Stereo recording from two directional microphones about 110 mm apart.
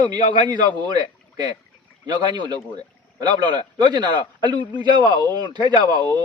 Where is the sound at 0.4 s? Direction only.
45° right (ahead or behind).